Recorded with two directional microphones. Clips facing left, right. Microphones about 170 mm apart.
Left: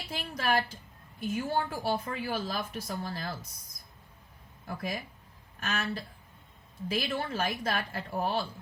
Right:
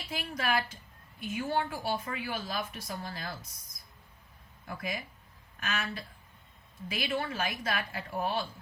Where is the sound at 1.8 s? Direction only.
40° left (ahead or behind).